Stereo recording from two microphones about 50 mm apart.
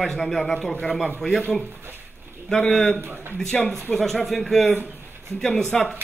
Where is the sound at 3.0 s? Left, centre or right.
Right.